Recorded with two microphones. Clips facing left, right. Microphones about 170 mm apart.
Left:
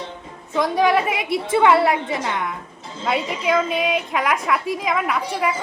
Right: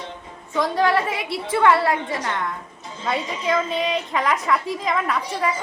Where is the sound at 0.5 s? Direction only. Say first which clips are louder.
Left 2 dB; 15° left (ahead or behind).